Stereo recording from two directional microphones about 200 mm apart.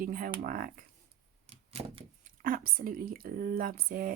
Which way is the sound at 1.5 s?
30° right (ahead or behind).